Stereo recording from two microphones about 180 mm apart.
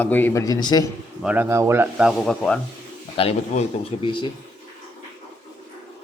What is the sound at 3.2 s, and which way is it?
A man's voice, 35° left (ahead or behind).